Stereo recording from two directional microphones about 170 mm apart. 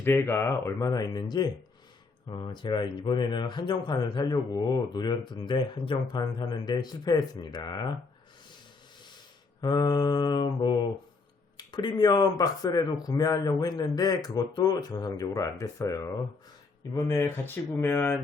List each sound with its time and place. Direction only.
0.0 s speech: 15° left (ahead or behind)
9.6 s speech: 25° left (ahead or behind)